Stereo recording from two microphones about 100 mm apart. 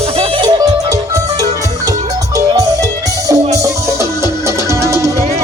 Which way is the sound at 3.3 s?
35° right (ahead or behind).